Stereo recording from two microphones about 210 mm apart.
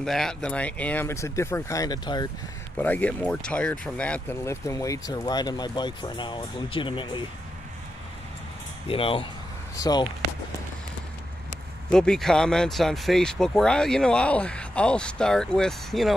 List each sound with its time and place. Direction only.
0.0 s speech: centre (ahead or behind); by 2.2 s 20° left (ahead or behind)
2.8 s speech: 5° left (ahead or behind); by 7.2 s 25° left (ahead or behind)
8.8 s speech: 25° left (ahead or behind)
11.9 s speech: 5° left (ahead or behind)